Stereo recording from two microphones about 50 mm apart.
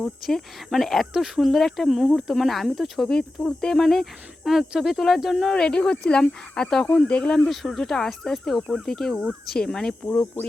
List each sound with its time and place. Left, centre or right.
0.3 s cricket: centre
5.5 s speech: centre
7.4 s cricket: centre
9.5 s speech: centre
10.1 s speech: left